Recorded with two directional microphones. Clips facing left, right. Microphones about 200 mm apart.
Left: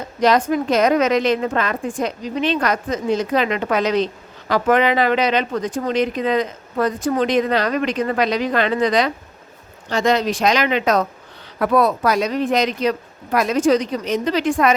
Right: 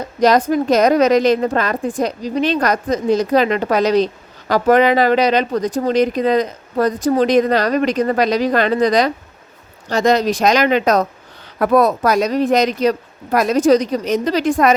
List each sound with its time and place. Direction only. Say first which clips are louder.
0.2 s a woman's voice: right 3 dB; 40° right (ahead or behind)